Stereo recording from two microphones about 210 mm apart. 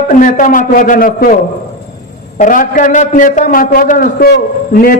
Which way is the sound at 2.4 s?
40° left (ahead or behind).